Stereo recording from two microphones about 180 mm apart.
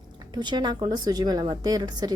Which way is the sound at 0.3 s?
25° right (ahead or behind).